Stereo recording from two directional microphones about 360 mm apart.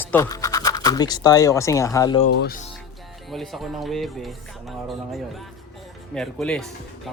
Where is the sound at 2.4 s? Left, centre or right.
Left.